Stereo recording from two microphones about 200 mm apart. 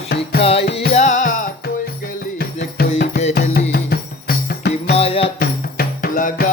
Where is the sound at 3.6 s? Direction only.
55° left (ahead or behind).